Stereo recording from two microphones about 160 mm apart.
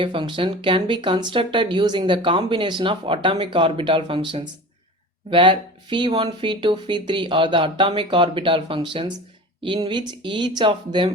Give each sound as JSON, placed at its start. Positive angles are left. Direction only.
{"t": 0.0, "sound": "speech", "side_deg": -30}